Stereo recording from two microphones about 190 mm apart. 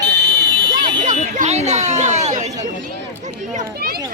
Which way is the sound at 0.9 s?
40° right (ahead or behind).